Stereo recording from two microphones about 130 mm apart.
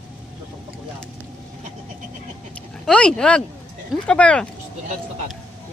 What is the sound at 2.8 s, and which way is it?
Speech, 5° left (ahead or behind).